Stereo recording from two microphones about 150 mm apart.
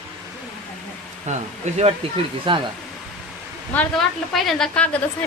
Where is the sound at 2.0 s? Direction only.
40° right (ahead or behind).